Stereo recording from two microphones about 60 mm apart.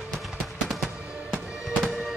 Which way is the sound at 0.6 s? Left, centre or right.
Centre.